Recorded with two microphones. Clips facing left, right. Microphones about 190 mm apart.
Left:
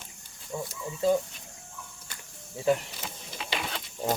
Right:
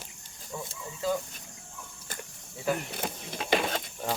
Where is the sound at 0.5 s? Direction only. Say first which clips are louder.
Left 4 dB; 15° left (ahead or behind).